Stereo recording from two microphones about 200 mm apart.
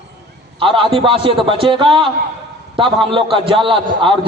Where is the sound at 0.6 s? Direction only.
25° right (ahead or behind).